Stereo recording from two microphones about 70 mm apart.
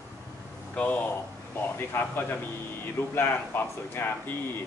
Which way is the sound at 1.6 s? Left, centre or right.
Left.